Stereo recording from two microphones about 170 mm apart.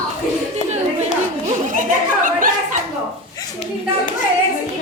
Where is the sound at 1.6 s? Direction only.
50° right (ahead or behind).